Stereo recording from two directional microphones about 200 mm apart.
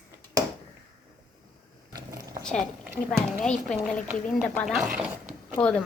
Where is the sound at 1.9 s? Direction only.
15° right (ahead or behind).